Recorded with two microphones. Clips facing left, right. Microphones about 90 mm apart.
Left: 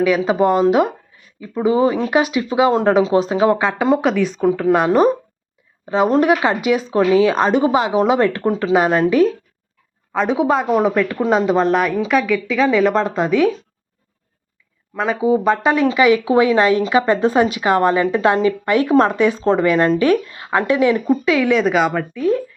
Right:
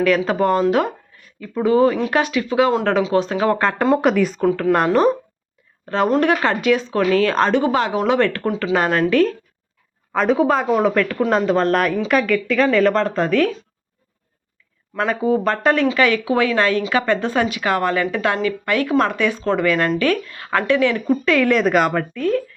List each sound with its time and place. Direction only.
0.0 s speech: 10° left (ahead or behind)
3.6 s a woman's voice: 5° left (ahead or behind)
4.9 s speech: 15° left (ahead or behind)
10.1 s a woman's voice: centre (ahead or behind)
14.9 s speech: 5° left (ahead or behind)